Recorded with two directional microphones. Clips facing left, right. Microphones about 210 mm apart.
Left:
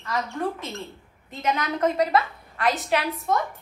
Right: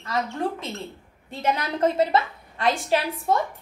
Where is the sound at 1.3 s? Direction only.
30° right (ahead or behind).